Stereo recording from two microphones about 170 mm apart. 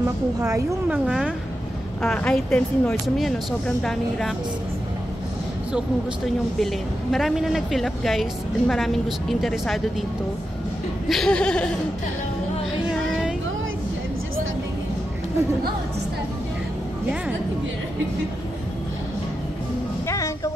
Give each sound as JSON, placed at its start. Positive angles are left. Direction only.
{"t": 0.0, "sound": "a woman's voice", "side_deg": -20}
{"t": 0.8, "sound": "a woman's voice", "side_deg": -5}
{"t": 2.0, "sound": "a woman's voice", "side_deg": 5}
{"t": 5.7, "sound": "a woman's voice", "side_deg": 0}
{"t": 11.1, "sound": "a woman's voice", "side_deg": 5}